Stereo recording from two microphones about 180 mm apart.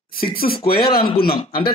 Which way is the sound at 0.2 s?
55° left (ahead or behind).